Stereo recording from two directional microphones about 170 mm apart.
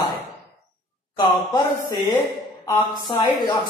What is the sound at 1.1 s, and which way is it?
A woman's voice, 25° left (ahead or behind).